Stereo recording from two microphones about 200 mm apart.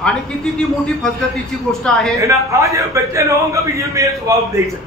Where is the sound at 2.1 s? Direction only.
15° right (ahead or behind).